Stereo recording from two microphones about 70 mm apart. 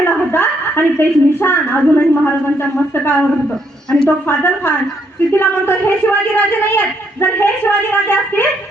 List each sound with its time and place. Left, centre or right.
0.0 s a woman's voice: left
4.3 s a man's voice: left